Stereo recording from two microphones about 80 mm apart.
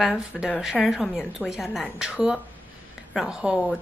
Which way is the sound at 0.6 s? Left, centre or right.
Centre.